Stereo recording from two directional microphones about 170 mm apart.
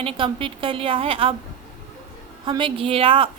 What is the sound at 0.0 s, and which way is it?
Speech, 30° right (ahead or behind).